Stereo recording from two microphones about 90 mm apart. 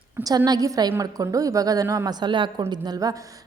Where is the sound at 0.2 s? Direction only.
45° right (ahead or behind).